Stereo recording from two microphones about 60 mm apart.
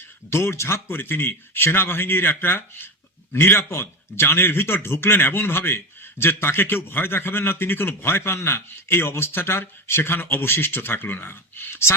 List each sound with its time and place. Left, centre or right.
0.3 s a man's voice: left